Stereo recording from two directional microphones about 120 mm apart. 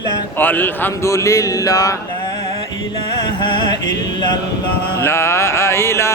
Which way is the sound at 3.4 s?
35° left (ahead or behind).